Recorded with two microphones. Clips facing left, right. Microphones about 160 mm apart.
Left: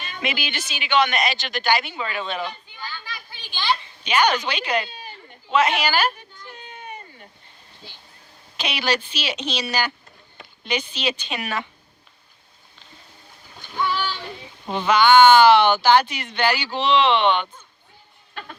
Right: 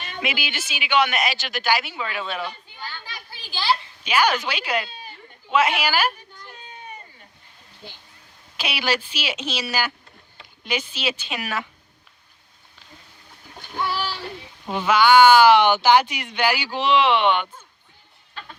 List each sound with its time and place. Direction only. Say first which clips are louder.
0.2 s speech: left 1 dB; 5° right (ahead or behind)
3.3 s children playing: right 1 dB; 35° right (ahead or behind)
4.0 s speech: left 1 dB; 5° right (ahead or behind)
8.5 s speech: left 1 dB; 10° right (ahead or behind)
13.6 s splash: left 2 dB; 40° right (ahead or behind)
14.7 s speech: even; 10° right (ahead or behind)